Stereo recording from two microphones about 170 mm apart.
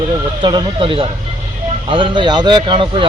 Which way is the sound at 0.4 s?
30° right (ahead or behind).